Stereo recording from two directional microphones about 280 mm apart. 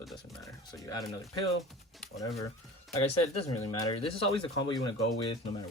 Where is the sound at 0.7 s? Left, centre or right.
Centre.